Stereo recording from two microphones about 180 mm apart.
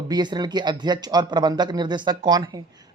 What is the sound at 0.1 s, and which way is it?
Speech, 25° right (ahead or behind).